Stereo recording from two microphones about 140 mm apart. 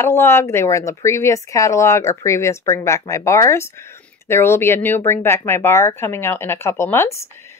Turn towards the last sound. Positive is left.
turn(degrees=20)  # may be behind; listen again after turning